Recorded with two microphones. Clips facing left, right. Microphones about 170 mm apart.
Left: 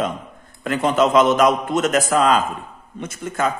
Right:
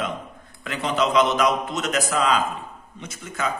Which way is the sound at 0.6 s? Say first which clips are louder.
Left 6 dB; 50° left (ahead or behind).